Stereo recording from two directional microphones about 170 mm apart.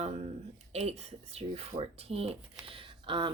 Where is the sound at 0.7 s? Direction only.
40° right (ahead or behind).